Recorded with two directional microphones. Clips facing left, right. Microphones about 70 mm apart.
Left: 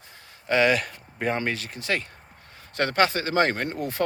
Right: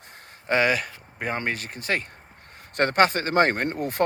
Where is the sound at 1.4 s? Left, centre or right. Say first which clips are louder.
Even; right.